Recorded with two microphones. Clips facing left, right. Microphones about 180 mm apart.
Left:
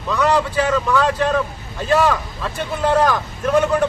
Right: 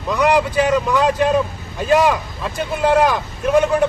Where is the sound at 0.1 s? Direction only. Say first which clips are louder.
Right 2 dB; 15° right (ahead or behind).